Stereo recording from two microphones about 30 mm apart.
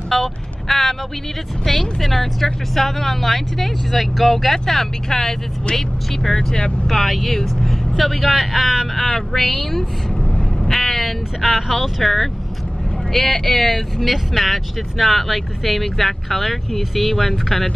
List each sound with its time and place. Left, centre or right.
0.1 s vehicle: centre
0.7 s a sound: centre
1.7 s speech: centre
5.1 s speech: centre
6.9 s speech: centre
7.6 s vehicle: centre
8.0 s speech: centre
8.9 s speech: centre
10.6 s vehicle: centre
11.4 s speech: centre
11.8 s speech: centre